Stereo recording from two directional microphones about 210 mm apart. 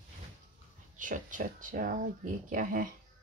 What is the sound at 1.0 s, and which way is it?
Speech, 40° right (ahead or behind).